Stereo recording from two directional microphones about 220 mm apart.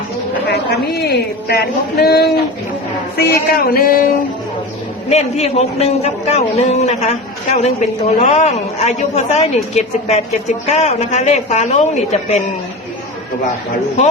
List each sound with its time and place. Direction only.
0.4 s a man's voice: 50° left (ahead or behind)
5.0 s a man's voice: 30° left (ahead or behind)